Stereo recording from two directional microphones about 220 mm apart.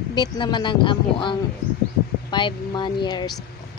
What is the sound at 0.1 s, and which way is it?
Speech, 20° left (ahead or behind).